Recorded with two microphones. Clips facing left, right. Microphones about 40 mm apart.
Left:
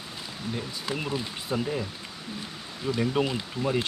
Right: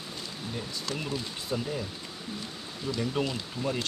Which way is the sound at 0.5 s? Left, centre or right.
Centre.